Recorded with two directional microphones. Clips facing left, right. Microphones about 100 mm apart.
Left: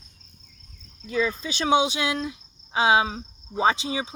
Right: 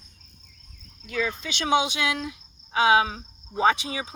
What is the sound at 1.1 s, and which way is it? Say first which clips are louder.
Speech: left 3 dB; 30° left (ahead or behind).